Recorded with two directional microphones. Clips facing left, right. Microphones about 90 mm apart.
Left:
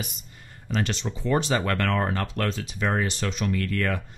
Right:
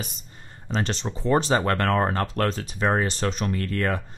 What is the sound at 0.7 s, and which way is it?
Speech, 35° right (ahead or behind).